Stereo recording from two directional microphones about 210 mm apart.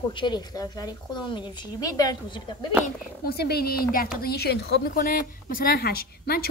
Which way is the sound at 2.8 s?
45° left (ahead or behind).